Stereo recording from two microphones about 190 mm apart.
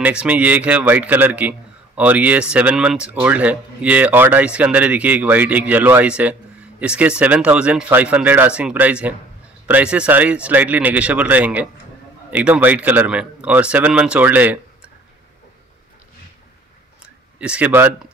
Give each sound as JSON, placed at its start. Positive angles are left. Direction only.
{"t": 0.0, "sound": "speech", "side_deg": -5}
{"t": 17.4, "sound": "speech", "side_deg": -5}